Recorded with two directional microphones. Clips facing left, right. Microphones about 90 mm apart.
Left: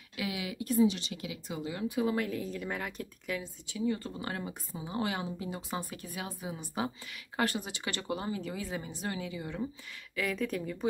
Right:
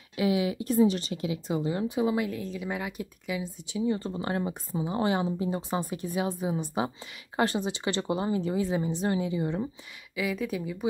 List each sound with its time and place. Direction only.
0.1 s speech: 30° right (ahead or behind)
2.1 s speech: centre (ahead or behind)
3.6 s speech: 20° right (ahead or behind)
10.1 s speech: 5° right (ahead or behind)